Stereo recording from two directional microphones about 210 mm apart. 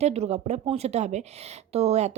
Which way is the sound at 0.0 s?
30° right (ahead or behind).